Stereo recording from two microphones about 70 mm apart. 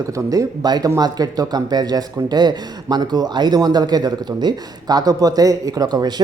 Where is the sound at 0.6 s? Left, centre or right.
Right.